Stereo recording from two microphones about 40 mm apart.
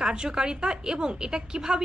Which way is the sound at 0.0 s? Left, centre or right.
Centre.